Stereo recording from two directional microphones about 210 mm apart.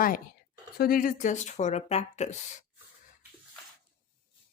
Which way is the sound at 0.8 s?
45° left (ahead or behind).